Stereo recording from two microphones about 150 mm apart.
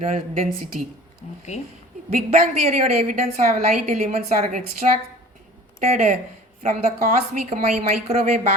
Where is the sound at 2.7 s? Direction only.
50° right (ahead or behind).